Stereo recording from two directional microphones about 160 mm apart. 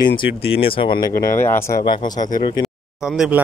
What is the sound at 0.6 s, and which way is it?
Speech, 35° left (ahead or behind).